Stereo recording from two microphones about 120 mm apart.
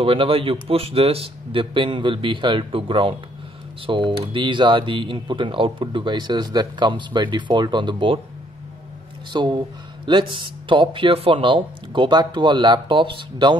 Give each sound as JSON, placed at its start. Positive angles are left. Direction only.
{"t": 0.0, "sound": "speech", "side_deg": -50}
{"t": 9.3, "sound": "speech", "side_deg": -40}